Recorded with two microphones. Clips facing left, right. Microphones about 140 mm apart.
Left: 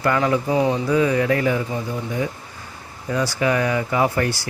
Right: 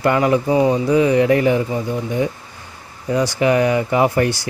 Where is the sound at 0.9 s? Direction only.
20° right (ahead or behind).